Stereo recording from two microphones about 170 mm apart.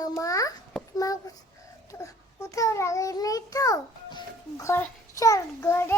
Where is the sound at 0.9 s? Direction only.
20° left (ahead or behind).